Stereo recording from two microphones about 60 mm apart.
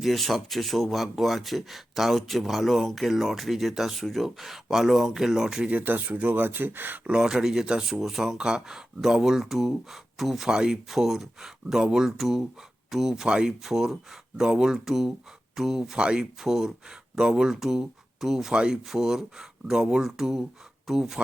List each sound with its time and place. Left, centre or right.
0.0 s speech: centre
5.6 s speech: right
7.1 s speech: centre